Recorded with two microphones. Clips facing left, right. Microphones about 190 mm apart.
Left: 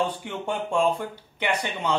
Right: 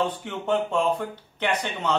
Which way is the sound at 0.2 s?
10° left (ahead or behind).